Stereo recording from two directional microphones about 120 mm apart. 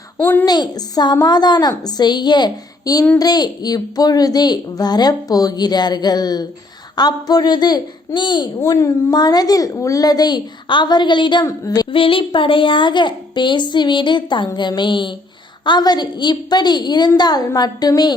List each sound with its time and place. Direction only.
0.2 s a woman's voice: 15° left (ahead or behind)
0.4 s a woman's voice: 35° left (ahead or behind)
8.6 s a woman's voice: 30° left (ahead or behind)
11.4 s a woman's voice: 30° left (ahead or behind)
11.9 s a woman's voice: 50° left (ahead or behind)